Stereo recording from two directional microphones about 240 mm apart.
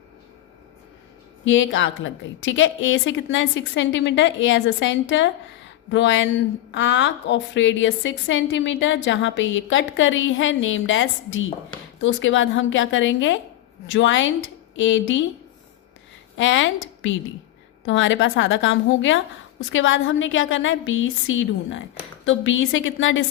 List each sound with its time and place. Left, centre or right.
1.5 s a woman's voice: left
16.4 s a woman's voice: left